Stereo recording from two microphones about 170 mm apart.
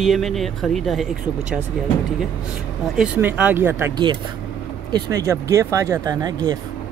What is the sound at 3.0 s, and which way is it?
Speech, 10° right (ahead or behind).